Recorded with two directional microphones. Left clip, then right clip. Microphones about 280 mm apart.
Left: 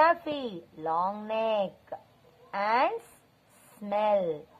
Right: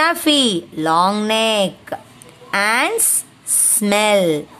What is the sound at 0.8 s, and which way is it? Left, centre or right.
A woman's voice, right.